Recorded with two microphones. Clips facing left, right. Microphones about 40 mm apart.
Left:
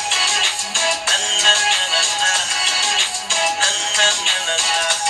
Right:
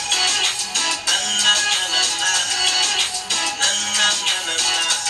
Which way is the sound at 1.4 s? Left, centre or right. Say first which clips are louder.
Left 4 dB; left.